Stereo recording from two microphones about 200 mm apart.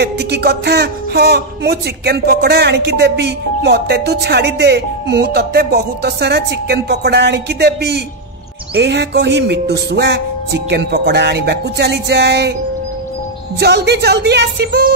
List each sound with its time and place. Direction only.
0.0 s speech: 55° right (ahead or behind)
13.6 s speech: 55° right (ahead or behind)